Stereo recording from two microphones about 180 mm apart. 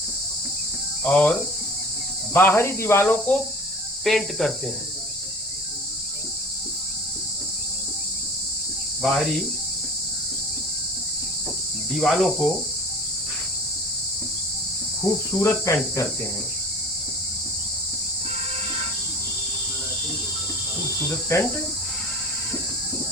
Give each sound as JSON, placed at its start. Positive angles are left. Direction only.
{"t": 1.0, "sound": "speech", "side_deg": 10}
{"t": 2.3, "sound": "speech", "side_deg": 10}
{"t": 9.0, "sound": "speech", "side_deg": 0}
{"t": 11.9, "sound": "speech", "side_deg": 0}
{"t": 15.1, "sound": "speech", "side_deg": 20}